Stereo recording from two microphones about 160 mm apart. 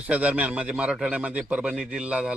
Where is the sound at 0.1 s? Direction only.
10° right (ahead or behind).